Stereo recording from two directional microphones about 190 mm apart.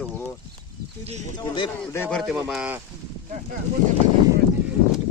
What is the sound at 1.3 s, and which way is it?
Speech, 25° left (ahead or behind).